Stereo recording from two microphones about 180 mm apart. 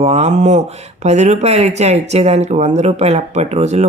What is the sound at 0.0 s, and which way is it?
Speech, 40° right (ahead or behind).